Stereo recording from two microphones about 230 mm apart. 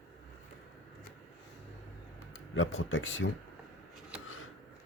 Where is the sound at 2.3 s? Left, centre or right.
Left.